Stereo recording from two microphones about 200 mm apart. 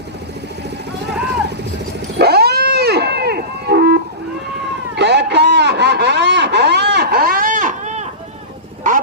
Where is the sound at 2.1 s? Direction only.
55° right (ahead or behind).